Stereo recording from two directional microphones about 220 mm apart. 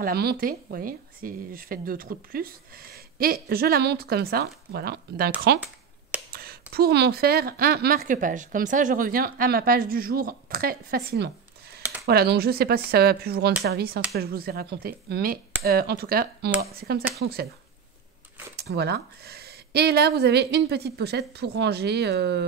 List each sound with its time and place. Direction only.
0.0 s speech: 45° right (ahead or behind)
6.3 s speech: 45° right (ahead or behind)
11.8 s a sound: 5° right (ahead or behind)
12.1 s speech: 45° right (ahead or behind)
18.6 s speech: 50° right (ahead or behind)